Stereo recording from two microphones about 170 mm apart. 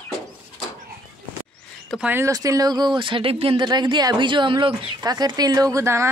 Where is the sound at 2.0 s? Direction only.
15° right (ahead or behind).